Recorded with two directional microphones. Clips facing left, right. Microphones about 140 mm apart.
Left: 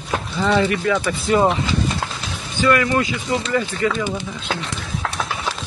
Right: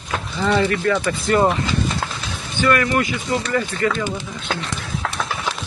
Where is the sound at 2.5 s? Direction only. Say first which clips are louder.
Left 1 dB; 20° left (ahead or behind).